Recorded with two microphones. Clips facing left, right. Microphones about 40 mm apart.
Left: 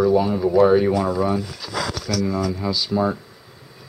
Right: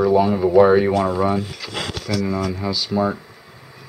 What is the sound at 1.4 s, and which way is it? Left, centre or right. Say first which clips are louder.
Speech: even; right.